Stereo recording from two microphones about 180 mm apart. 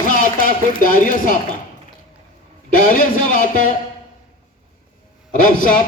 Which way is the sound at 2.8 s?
50° left (ahead or behind).